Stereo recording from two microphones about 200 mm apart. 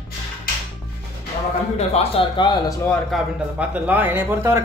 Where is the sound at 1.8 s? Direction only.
30° left (ahead or behind).